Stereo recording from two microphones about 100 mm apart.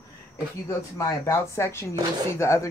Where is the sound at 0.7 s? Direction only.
30° left (ahead or behind).